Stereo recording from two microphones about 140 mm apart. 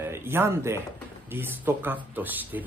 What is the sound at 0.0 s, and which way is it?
Speech, 15° right (ahead or behind).